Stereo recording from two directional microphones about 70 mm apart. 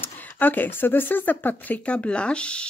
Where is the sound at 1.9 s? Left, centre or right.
Centre.